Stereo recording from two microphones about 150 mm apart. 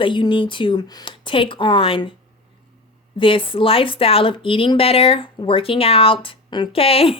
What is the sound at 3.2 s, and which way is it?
Speech, 35° left (ahead or behind).